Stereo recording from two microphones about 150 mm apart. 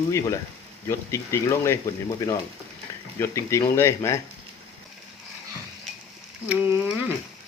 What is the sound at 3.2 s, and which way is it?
Speech, 20° left (ahead or behind).